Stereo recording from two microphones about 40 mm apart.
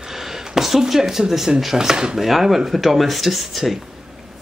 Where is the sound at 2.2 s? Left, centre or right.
Centre.